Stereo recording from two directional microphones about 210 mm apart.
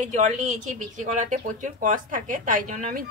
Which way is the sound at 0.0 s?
35° right (ahead or behind).